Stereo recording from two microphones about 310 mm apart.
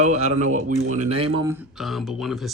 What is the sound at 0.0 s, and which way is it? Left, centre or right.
Speech, right.